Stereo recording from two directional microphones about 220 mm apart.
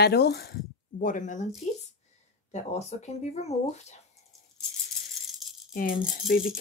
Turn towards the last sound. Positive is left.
turn(degrees=40)  # may be behind; listen again after turning